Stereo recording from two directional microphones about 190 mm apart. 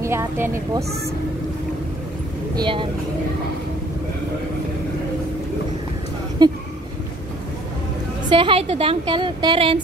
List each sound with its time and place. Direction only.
0.0 s speech: 15° right (ahead or behind)
2.5 s a woman's voice: 25° right (ahead or behind)
6.4 s a woman's voice: 20° right (ahead or behind)
8.3 s a woman's voice: 25° right (ahead or behind)